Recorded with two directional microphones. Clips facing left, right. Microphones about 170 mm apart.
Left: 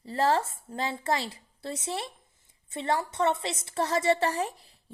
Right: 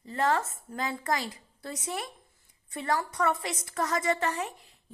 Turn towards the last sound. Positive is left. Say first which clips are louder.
# left 3 dB
turn(degrees=35)  # may be behind; listen again after turning